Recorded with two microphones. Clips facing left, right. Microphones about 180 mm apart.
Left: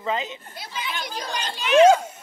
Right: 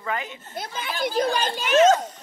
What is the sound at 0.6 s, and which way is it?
A child's voice, 50° right (ahead or behind).